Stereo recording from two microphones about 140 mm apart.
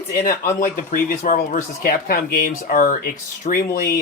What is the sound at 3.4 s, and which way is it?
Speech, 85° left.